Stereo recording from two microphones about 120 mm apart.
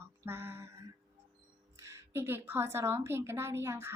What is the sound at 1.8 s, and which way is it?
Child singing, 20° right (ahead or behind).